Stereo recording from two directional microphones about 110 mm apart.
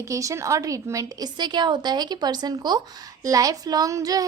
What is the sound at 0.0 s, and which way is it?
A woman's voice, 30° right (ahead or behind).